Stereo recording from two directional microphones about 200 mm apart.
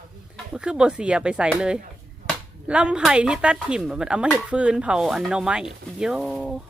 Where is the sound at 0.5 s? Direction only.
5° right (ahead or behind).